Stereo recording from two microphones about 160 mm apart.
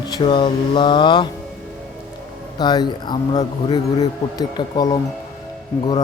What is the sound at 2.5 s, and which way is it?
Speech, 25° left (ahead or behind).